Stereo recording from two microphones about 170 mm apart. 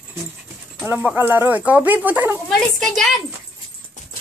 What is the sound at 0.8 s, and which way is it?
Speech, 10° right (ahead or behind).